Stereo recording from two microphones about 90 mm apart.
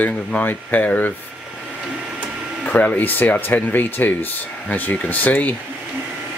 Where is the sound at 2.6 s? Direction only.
15° left (ahead or behind).